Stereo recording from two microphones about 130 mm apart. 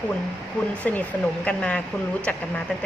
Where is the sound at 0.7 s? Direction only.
10° left (ahead or behind).